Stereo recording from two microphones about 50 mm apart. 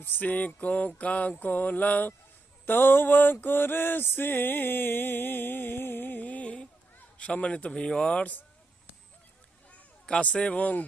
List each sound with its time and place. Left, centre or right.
0.0 s music: left
2.6 s a sound: left
7.2 s speech: left
7.7 s speech: centre
9.6 s speech: left